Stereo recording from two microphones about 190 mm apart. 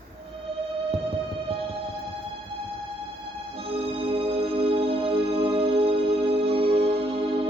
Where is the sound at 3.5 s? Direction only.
30° right (ahead or behind).